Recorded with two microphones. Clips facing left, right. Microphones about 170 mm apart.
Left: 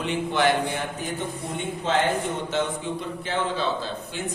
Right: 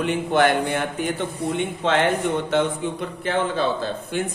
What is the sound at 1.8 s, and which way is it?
A man's voice, 65° right (ahead or behind).